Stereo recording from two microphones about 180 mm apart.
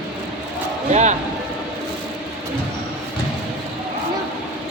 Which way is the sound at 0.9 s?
40° right (ahead or behind).